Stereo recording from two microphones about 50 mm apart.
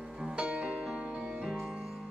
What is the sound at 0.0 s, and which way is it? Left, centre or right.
Music, centre.